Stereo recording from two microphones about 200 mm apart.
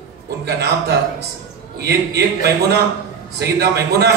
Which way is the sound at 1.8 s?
55° right (ahead or behind).